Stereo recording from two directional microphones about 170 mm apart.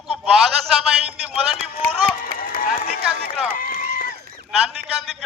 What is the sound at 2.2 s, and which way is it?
Run, 60° left (ahead or behind).